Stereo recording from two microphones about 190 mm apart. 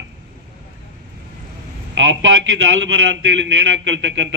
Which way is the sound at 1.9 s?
75° right (ahead or behind).